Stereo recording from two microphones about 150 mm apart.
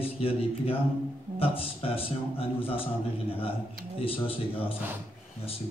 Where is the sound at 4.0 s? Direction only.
40° left (ahead or behind).